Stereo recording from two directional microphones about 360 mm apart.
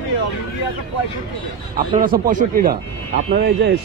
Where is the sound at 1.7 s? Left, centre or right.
Right.